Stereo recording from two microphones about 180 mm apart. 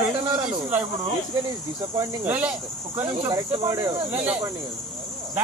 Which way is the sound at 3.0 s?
20° right (ahead or behind).